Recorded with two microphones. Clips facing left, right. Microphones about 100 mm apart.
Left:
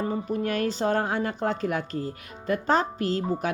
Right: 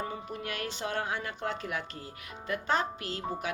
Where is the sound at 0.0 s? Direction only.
35° left (ahead or behind).